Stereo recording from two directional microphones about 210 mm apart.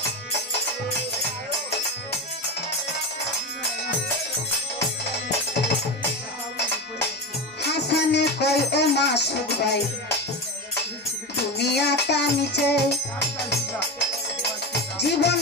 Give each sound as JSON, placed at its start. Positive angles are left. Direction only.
{"t": 7.6, "sound": "music", "side_deg": 55}
{"t": 11.5, "sound": "music", "side_deg": 50}